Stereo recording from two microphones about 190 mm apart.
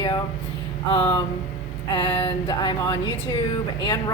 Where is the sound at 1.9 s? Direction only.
25° left (ahead or behind).